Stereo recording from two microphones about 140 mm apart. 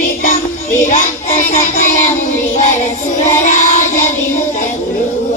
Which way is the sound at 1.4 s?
60° left (ahead or behind).